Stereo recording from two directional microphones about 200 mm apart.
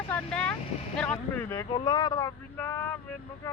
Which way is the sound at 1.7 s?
20° left (ahead or behind).